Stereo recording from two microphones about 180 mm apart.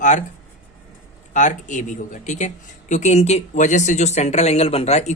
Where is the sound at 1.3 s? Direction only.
45° left (ahead or behind).